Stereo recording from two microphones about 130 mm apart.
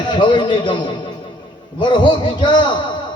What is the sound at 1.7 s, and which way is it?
Speech, 35° left (ahead or behind).